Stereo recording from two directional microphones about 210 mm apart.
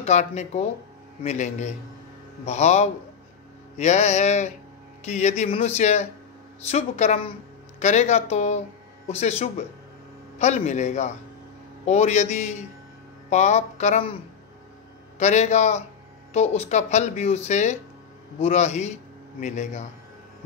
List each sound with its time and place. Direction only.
0.0 s speech: 35° left (ahead or behind)
10.4 s speech: 35° left (ahead or behind)
15.1 s speech: 35° left (ahead or behind)